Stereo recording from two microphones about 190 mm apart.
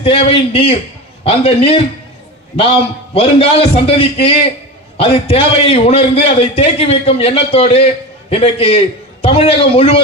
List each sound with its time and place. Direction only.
0.0 s a man's voice: 30° left (ahead or behind)
3.2 s a man's voice: 30° left (ahead or behind)